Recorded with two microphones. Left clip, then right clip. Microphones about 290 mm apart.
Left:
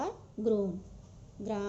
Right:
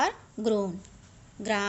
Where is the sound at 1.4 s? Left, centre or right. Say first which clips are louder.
Right 8 dB; right.